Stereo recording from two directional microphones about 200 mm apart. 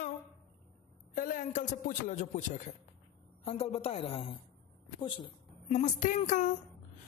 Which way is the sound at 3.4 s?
30° left (ahead or behind).